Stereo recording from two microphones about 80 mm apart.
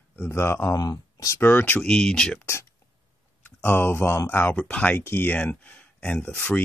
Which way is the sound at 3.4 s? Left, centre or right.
Left.